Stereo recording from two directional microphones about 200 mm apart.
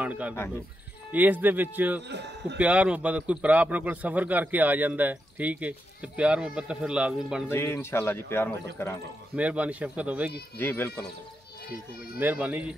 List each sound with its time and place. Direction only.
0.0 s a man's voice: 5° right (ahead or behind)
2.0 s speech: 60° right (ahead or behind)
2.6 s a man's voice: 5° right (ahead or behind)
7.5 s speech: 10° left (ahead or behind)
9.3 s a man's voice: 5° right (ahead or behind)
10.6 s speech: 10° left (ahead or behind)
12.2 s a man's voice: 10° right (ahead or behind)